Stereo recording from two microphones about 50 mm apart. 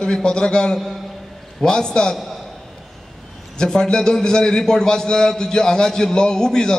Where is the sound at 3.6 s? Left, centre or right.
Centre.